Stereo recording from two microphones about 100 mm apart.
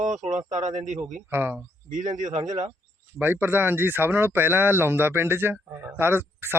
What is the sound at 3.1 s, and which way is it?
Speech, 20° right (ahead or behind).